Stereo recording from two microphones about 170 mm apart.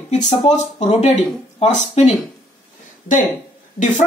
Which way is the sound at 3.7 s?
45° left (ahead or behind).